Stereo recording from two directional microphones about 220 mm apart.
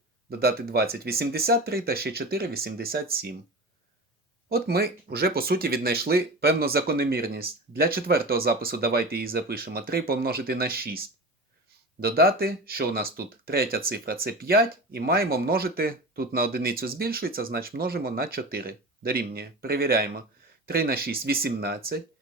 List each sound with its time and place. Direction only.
0.3 s speech: 45° right (ahead or behind)
4.4 s speech: 45° right (ahead or behind)